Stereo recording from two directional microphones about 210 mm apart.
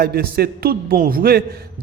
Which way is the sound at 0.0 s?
45° right (ahead or behind).